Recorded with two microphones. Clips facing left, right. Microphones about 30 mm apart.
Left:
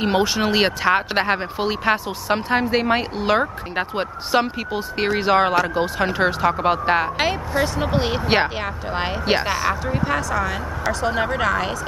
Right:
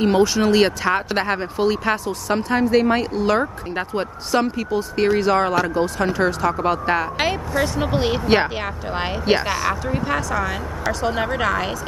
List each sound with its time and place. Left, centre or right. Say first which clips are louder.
0.0 s speech: right 3 dB; centre
7.2 s speech: even; centre